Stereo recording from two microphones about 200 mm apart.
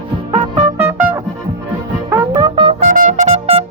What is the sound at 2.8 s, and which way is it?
Music, 40° right (ahead or behind).